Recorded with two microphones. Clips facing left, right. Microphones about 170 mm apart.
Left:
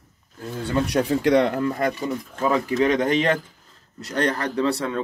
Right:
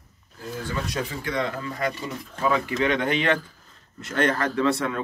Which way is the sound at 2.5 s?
35° left (ahead or behind).